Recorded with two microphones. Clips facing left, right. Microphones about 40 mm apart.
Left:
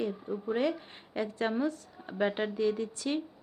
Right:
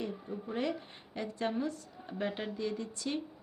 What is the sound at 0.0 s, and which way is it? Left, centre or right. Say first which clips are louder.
A woman's voice: left 5 dB; centre.